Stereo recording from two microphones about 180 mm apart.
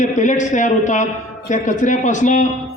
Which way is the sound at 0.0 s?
45° left (ahead or behind).